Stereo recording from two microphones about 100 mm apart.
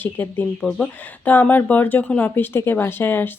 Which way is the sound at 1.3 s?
20° left (ahead or behind).